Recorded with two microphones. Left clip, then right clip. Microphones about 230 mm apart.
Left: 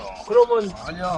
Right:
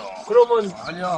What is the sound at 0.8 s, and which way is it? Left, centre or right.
Speech, centre.